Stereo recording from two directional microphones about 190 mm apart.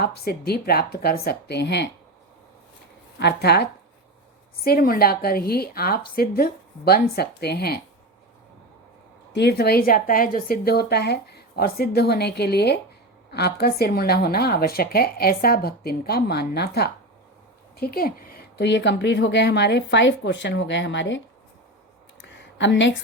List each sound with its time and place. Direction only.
0.0 s a woman's voice: 55° left (ahead or behind)
3.2 s a woman's voice: 60° left (ahead or behind)
9.3 s a woman's voice: 60° left (ahead or behind)
22.2 s a sound: 70° left (ahead or behind)